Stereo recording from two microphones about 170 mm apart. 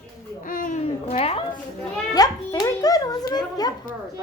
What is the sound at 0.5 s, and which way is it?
Speech, 55° left (ahead or behind).